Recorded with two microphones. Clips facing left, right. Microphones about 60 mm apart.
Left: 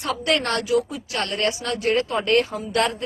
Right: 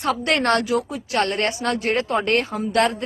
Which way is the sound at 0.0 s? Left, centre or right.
Right.